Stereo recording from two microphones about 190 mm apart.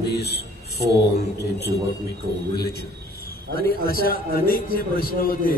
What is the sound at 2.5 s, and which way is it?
A man's voice, 55° left (ahead or behind).